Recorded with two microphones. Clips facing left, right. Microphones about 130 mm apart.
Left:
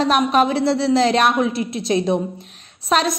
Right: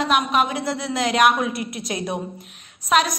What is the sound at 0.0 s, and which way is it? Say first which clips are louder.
A woman's voice: left 4 dB; 35° left (ahead or behind).